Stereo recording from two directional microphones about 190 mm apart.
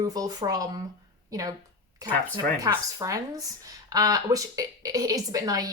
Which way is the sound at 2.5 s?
20° right (ahead or behind).